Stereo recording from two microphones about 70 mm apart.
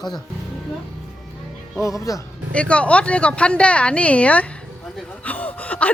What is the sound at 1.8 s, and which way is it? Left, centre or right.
Speech, left.